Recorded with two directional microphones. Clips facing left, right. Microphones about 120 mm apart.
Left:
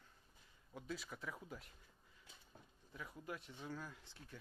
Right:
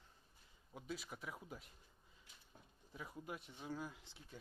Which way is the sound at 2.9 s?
20° right (ahead or behind).